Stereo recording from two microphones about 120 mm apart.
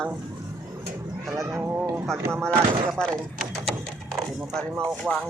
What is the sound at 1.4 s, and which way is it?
Speech, 25° right (ahead or behind).